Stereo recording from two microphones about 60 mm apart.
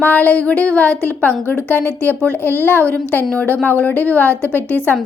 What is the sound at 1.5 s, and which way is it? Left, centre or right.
A woman's voice, left.